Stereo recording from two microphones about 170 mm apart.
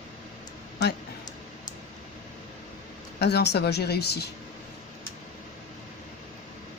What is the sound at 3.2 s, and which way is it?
Speech, 75° left (ahead or behind).